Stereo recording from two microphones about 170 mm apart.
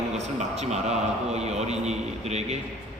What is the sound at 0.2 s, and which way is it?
A man's voice, 40° right (ahead or behind).